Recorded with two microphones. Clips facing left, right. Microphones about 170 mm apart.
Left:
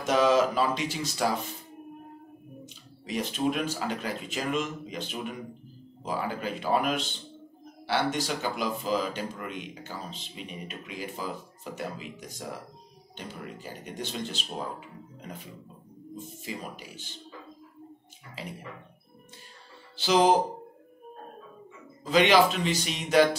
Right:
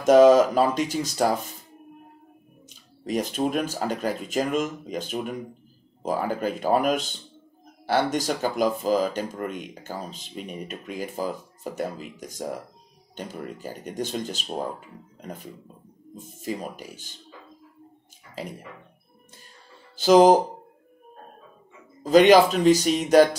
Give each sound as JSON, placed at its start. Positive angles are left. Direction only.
{"t": 0.0, "sound": "speech", "side_deg": -45}
{"t": 2.6, "sound": "speech", "side_deg": -45}
{"t": 16.4, "sound": "speech", "side_deg": -45}
{"t": 20.0, "sound": "speech", "side_deg": -45}
{"t": 22.0, "sound": "speech", "side_deg": -45}